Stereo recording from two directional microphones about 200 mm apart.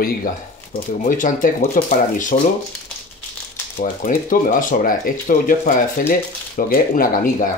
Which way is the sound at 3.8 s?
40° left (ahead or behind).